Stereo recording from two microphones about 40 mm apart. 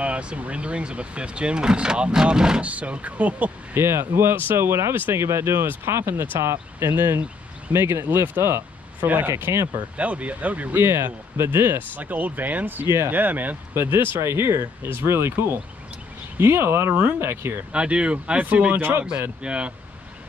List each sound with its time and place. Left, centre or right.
0.0 s speech: right
2.6 s speech: right
3.7 s speech: right
9.0 s speech: right
10.7 s speech: right
11.3 s speech: right
12.0 s speech: right
13.7 s speech: right
17.2 s speech: right
17.7 s speech: right
18.8 s speech: right
19.4 s speech: right